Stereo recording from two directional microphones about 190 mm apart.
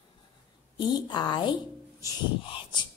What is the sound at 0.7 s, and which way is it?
Speech, 25° left (ahead or behind).